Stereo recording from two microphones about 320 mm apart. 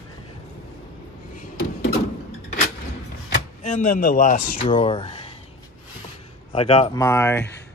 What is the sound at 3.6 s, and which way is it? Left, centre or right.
Speech, left.